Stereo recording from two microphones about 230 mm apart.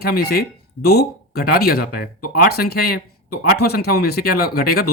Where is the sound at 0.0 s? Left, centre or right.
Left.